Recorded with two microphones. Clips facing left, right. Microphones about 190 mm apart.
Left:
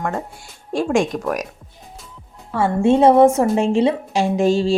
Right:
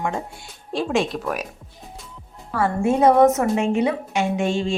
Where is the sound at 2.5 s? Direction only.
25° left (ahead or behind).